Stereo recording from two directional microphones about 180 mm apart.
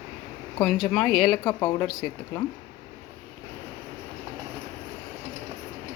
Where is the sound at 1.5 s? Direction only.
25° left (ahead or behind).